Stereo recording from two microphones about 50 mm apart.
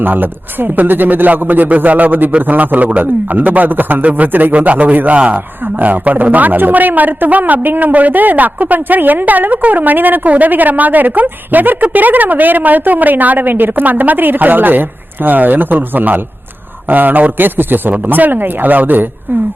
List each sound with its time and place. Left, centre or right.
0.0 s a woman's voice: right